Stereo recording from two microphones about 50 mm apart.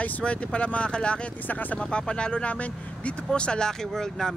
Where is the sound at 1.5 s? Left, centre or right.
Left.